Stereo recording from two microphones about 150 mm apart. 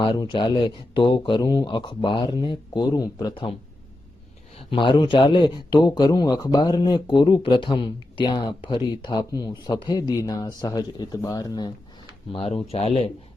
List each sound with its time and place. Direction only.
0.0 s speech: 30° left (ahead or behind)
4.5 s speech: 35° left (ahead or behind)